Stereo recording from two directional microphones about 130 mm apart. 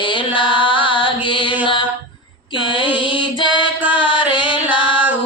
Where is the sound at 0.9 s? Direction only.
40° left (ahead or behind).